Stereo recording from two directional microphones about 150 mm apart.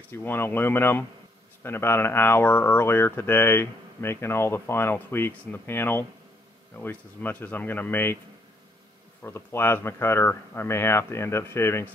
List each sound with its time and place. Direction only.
0.1 s speech: 15° left (ahead or behind)
9.2 s speech: 15° left (ahead or behind)